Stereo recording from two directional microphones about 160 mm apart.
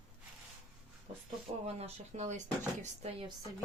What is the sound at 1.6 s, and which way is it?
Speech, 40° right (ahead or behind).